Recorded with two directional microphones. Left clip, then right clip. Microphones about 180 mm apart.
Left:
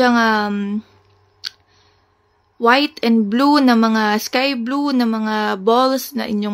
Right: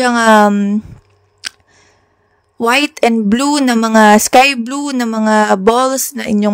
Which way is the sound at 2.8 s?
50° right (ahead or behind).